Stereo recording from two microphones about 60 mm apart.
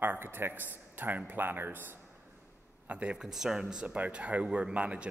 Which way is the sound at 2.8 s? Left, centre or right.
Right.